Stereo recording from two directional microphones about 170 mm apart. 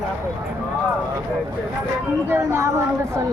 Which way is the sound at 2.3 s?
15° right (ahead or behind).